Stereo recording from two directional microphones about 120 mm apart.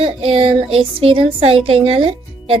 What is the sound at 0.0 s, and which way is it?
Speech, 50° right (ahead or behind).